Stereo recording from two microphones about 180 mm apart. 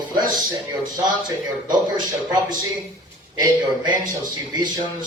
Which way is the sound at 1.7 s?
25° right (ahead or behind).